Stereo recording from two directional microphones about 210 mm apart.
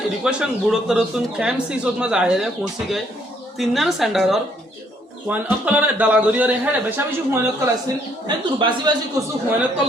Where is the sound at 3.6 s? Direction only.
Centre (ahead or behind).